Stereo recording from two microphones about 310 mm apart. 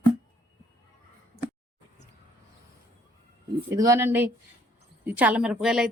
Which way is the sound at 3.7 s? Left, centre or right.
Centre.